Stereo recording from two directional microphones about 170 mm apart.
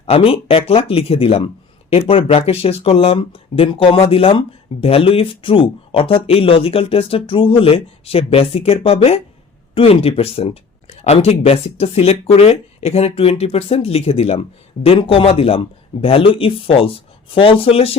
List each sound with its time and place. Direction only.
0.0 s speech: 35° left (ahead or behind)